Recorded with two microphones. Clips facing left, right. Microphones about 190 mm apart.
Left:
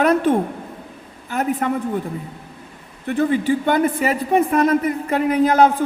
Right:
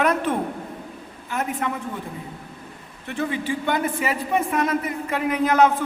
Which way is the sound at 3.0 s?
40° left (ahead or behind).